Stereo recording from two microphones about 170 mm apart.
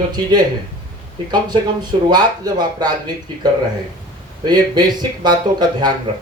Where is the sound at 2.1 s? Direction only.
25° right (ahead or behind).